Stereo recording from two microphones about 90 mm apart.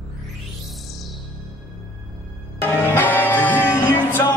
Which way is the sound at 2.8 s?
25° left (ahead or behind).